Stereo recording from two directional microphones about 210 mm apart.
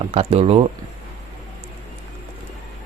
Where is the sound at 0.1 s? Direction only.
30° right (ahead or behind).